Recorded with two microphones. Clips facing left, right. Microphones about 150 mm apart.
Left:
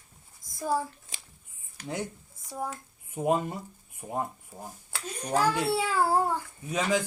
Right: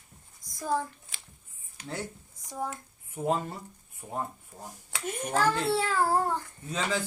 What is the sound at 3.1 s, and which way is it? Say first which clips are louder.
Speech: left 3 dB; 15° left (ahead or behind).